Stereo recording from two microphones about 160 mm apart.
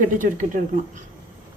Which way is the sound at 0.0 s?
55° right (ahead or behind).